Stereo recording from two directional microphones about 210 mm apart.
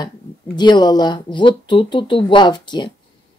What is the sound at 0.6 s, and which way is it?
Speech, 20° left (ahead or behind).